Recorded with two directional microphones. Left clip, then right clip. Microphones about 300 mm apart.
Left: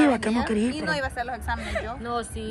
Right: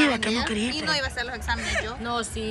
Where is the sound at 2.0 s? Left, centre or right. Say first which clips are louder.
Right 1 dB; right.